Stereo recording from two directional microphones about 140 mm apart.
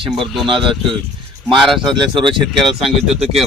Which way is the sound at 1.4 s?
Centre (ahead or behind).